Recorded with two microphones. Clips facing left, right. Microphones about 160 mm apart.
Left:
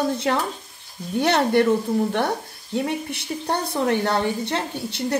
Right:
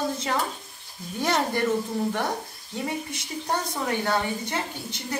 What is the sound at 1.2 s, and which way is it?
Speech, 65° left (ahead or behind).